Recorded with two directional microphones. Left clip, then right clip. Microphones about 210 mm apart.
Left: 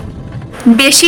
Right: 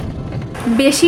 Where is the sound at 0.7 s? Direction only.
45° left (ahead or behind).